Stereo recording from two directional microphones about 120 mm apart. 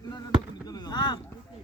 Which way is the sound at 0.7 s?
35° left (ahead or behind).